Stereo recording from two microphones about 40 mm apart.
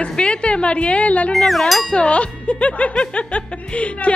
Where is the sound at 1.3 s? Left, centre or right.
Centre.